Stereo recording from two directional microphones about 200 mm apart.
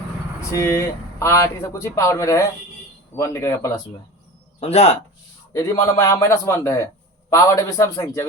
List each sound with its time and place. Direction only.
0.5 s speech: 15° left (ahead or behind)
4.6 s speech: 35° left (ahead or behind)
5.5 s speech: 15° left (ahead or behind)